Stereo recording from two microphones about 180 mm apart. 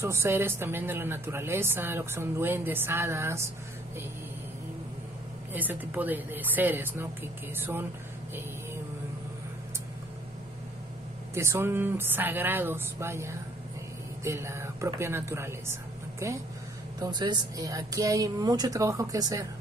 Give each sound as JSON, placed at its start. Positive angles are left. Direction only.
{"t": 0.0, "sound": "speech", "side_deg": -15}
{"t": 5.5, "sound": "speech", "side_deg": -10}
{"t": 11.3, "sound": "speech", "side_deg": -15}